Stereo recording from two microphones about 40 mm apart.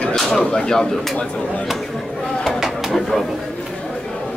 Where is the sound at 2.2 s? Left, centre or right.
Centre.